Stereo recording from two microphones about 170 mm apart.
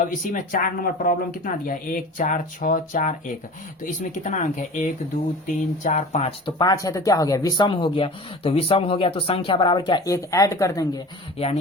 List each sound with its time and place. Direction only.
0.1 s speech: 50° left (ahead or behind)
6.4 s speech: 25° left (ahead or behind)